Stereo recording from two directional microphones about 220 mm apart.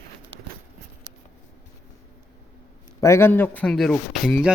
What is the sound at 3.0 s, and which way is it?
Speech, 10° left (ahead or behind).